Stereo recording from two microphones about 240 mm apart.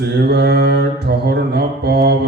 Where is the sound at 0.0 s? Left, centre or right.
Right.